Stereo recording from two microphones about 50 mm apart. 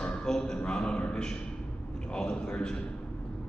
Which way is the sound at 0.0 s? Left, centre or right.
Centre.